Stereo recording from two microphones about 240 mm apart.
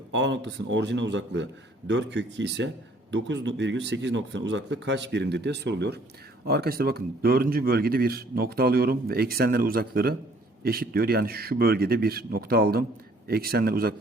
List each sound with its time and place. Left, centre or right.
0.1 s speech: right